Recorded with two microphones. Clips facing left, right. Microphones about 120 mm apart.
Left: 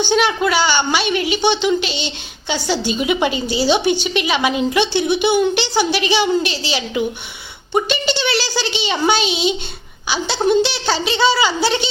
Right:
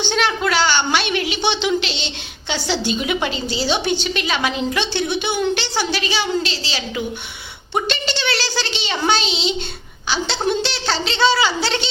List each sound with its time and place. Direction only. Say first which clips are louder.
0.0 s a woman's voice: left 4 dB; 5° left (ahead or behind)